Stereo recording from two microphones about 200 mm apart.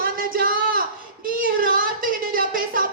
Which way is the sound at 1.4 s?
45° right (ahead or behind).